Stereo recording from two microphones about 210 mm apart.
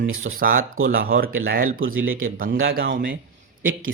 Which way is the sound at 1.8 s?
70° right (ahead or behind).